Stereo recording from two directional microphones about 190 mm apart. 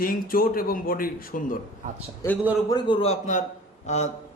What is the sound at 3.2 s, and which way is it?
Speech, 40° left (ahead or behind).